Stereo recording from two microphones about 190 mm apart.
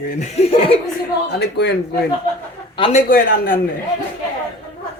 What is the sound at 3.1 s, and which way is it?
Speech, 50° left (ahead or behind).